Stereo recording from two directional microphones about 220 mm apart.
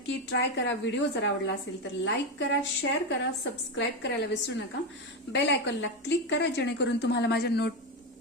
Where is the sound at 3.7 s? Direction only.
55° left (ahead or behind).